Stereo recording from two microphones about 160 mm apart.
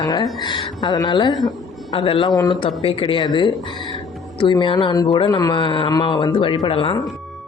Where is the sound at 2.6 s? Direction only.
35° left (ahead or behind).